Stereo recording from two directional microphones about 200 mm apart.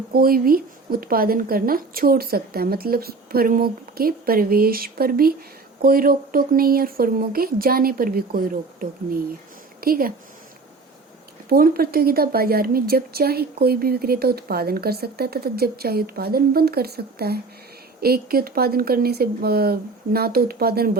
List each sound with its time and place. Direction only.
0.1 s a woman's voice: 50° right (ahead or behind)
11.4 s a woman's voice: 50° right (ahead or behind)